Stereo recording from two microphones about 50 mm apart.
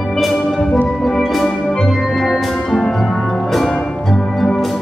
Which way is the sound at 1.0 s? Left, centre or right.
Centre.